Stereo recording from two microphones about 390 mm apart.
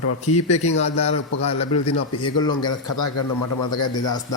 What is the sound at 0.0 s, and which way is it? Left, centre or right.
Speech, left.